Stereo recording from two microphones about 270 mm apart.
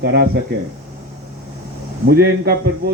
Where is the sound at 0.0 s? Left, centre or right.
Right.